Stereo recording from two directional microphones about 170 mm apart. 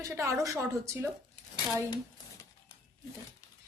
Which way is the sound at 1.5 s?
25° left (ahead or behind).